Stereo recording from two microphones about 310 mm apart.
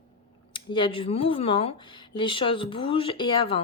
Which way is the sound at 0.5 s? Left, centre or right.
Centre.